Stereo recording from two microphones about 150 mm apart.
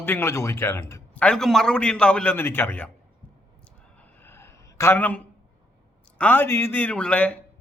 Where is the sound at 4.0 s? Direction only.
15° left (ahead or behind).